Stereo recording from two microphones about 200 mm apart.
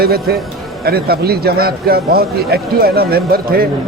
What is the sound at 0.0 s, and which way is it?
A man's voice, 50° right (ahead or behind).